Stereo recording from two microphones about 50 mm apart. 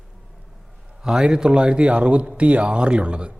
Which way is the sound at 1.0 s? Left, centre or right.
Centre.